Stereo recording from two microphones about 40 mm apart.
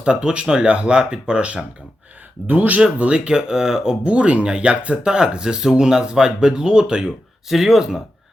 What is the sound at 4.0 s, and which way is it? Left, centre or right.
Speech, right.